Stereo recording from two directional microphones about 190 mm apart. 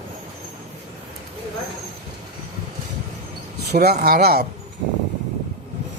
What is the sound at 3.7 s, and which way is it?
Speech, 55° right (ahead or behind).